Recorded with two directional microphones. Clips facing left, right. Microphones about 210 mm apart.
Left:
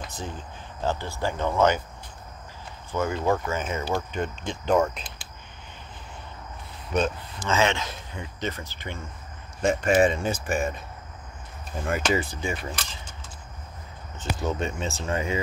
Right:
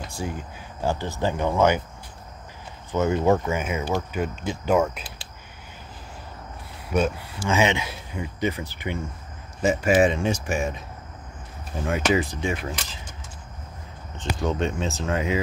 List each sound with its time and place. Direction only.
0.1 s speech: 10° right (ahead or behind)
2.9 s speech: 20° right (ahead or behind)
6.9 s speech: 10° right (ahead or behind)
11.8 s speech: centre (ahead or behind)
14.1 s speech: 5° left (ahead or behind)